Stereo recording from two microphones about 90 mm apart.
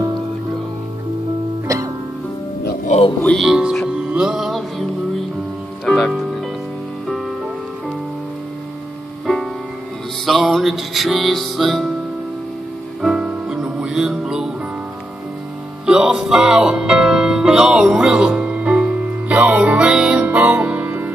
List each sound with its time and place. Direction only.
1.7 s music: 40° right (ahead or behind)
3.3 s music: 10° right (ahead or behind)
5.9 s music: 5° left (ahead or behind)
9.2 s music: 5° left (ahead or behind)
13.0 s music: 10° right (ahead or behind)
15.8 s music: 10° right (ahead or behind)